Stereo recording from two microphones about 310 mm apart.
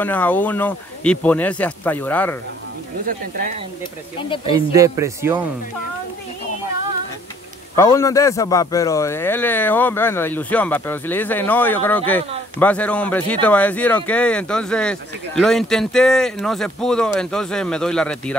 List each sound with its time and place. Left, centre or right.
0.0 s speech: centre
3.1 s speech: right
4.5 s speech: centre
7.7 s a man's voice: centre